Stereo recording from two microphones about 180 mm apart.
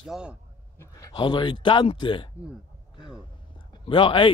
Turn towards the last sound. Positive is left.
turn(degrees=30)  # may be behind; listen again after turning